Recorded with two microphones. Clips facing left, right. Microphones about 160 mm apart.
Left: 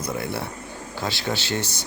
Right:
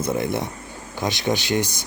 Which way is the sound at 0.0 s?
20° right (ahead or behind).